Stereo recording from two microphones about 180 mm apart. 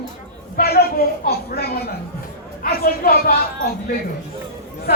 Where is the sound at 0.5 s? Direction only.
60° left (ahead or behind).